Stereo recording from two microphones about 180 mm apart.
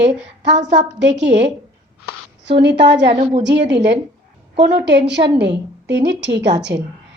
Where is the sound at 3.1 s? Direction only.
35° right (ahead or behind).